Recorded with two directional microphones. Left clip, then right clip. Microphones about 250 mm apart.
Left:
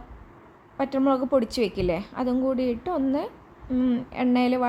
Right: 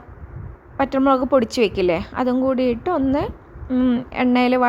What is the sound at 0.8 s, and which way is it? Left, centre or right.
A woman's voice, centre.